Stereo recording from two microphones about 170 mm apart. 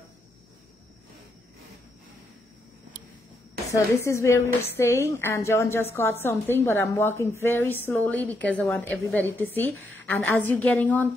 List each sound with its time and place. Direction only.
3.6 s a woman's voice: 20° left (ahead or behind)